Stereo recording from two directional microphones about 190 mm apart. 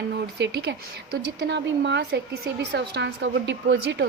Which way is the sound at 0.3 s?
60° right (ahead or behind).